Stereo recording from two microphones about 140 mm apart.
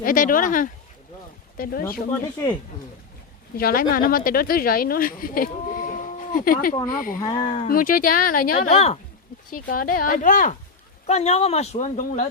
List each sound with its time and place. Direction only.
0.0 s speech: 75° left (ahead or behind)
1.5 s speech: 90° left
3.6 s speech: 90° left
7.2 s speech: 30° left (ahead or behind)
7.7 s speech: 85° left
8.7 s speech: 50° left (ahead or behind)
9.5 s speech: 90° left; by 10.5 s 65° left (ahead or behind)
11.0 s speech: 50° left (ahead or behind)